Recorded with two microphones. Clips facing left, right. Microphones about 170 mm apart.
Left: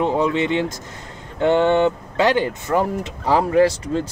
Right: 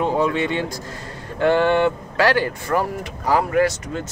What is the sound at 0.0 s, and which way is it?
Speech, 20° left (ahead or behind).